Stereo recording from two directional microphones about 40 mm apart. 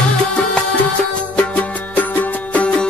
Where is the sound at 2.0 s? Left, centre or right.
Left.